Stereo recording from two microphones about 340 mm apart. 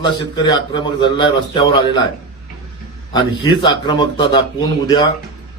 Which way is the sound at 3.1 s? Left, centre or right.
Centre.